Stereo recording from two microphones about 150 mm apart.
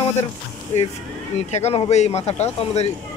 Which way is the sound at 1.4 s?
45° left (ahead or behind).